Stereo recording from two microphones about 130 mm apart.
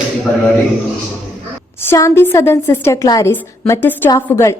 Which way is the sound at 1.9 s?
20° left (ahead or behind).